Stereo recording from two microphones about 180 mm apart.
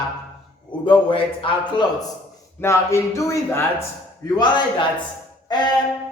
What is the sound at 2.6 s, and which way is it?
Speech, 15° left (ahead or behind).